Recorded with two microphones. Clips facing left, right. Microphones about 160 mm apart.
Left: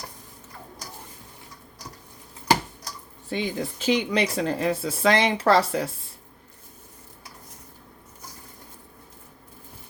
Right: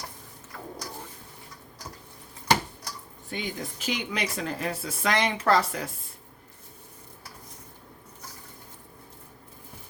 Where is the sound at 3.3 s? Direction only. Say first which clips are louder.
Left 6 dB; 30° left (ahead or behind).